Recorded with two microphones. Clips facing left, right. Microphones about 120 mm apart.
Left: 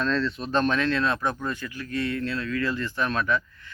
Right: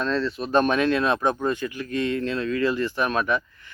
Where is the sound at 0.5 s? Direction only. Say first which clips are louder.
Right 4 dB; 15° right (ahead or behind).